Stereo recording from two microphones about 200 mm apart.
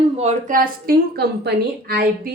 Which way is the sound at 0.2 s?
35° right (ahead or behind).